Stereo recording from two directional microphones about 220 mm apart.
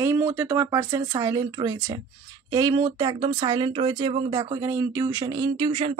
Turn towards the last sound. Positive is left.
turn(degrees=-25)  # may be behind; listen again after turning